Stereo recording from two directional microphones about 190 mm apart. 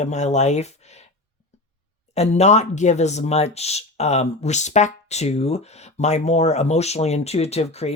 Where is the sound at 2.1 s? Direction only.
35° left (ahead or behind).